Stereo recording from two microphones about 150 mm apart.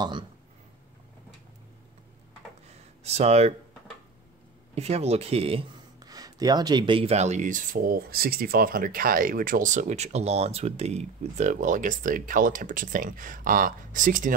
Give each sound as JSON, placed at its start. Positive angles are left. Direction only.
{"t": 3.0, "sound": "speech", "side_deg": -45}
{"t": 4.7, "sound": "speech", "side_deg": -45}
{"t": 6.0, "sound": "speech", "side_deg": -25}